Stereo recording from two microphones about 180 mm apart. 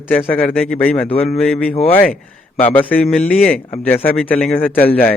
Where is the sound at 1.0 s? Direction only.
35° left (ahead or behind).